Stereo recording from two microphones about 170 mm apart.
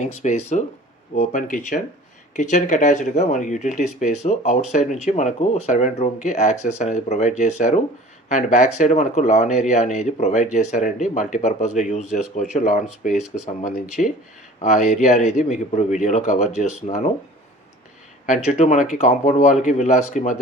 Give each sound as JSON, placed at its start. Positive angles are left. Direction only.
{"t": 0.0, "sound": "speech", "side_deg": 45}
{"t": 18.3, "sound": "speech", "side_deg": 45}